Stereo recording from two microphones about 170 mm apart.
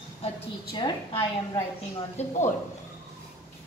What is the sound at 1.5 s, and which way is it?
Speech, 30° left (ahead or behind).